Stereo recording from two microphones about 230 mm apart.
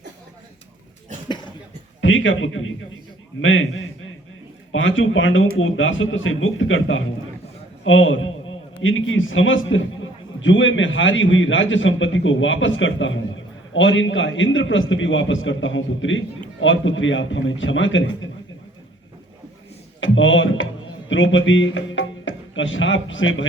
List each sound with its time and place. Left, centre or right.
2.0 s a man's voice: left
20.0 s a man's voice: left